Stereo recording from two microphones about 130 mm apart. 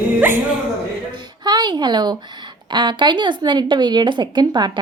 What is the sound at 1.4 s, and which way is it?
Speech, 35° right (ahead or behind).